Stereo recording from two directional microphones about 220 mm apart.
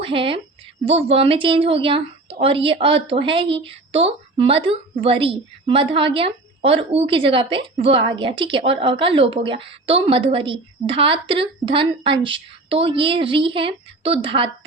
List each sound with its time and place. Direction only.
0.0 s a woman's voice: 25° right (ahead or behind)